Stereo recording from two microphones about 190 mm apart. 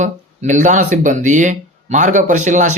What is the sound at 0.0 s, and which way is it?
Speech, 40° right (ahead or behind).